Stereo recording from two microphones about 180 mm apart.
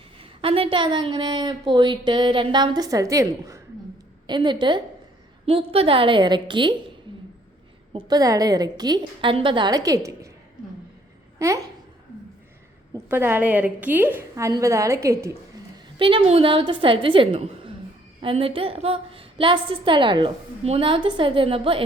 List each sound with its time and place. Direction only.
0.2 s a woman's voice: 30° right (ahead or behind)
7.9 s a woman's voice: 20° right (ahead or behind)
11.3 s speech: 15° right (ahead or behind)
13.1 s a woman's voice: 10° right (ahead or behind)
16.0 s a woman's voice: 30° right (ahead or behind)